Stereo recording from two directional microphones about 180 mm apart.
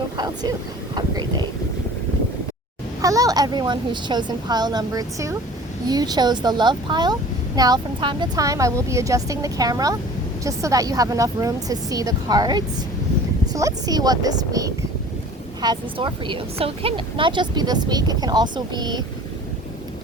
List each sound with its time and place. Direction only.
0.9 s speech: 25° right (ahead or behind)
3.0 s speech: 20° right (ahead or behind)